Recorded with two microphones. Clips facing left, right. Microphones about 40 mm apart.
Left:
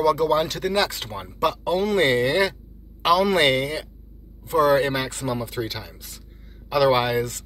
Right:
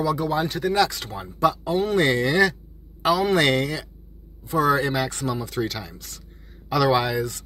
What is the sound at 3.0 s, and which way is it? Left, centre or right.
Speech, left.